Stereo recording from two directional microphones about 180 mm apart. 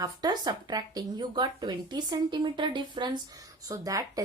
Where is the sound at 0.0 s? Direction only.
20° right (ahead or behind).